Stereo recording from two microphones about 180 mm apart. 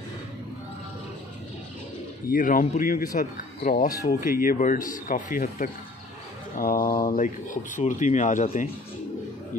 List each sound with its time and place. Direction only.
2.3 s speech: 50° left (ahead or behind)